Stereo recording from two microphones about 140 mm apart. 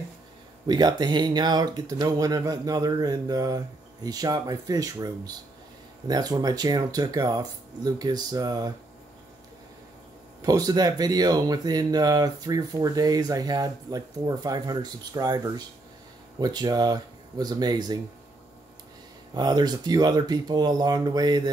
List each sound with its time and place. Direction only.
0.7 s speech: 30° right (ahead or behind)
10.4 s speech: 25° right (ahead or behind)
19.3 s speech: 30° right (ahead or behind)